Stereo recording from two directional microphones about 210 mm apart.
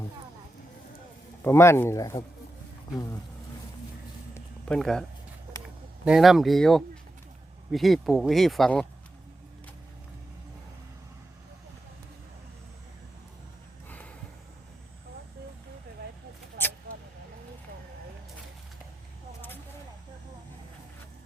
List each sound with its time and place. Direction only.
1.5 s speech: 10° left (ahead or behind)
4.7 s speech: centre (ahead or behind)
6.1 s speech: centre (ahead or behind)